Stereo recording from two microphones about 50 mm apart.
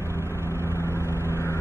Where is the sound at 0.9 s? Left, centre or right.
Left.